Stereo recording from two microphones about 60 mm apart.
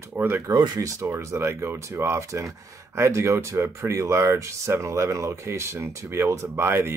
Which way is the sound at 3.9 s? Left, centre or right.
Right.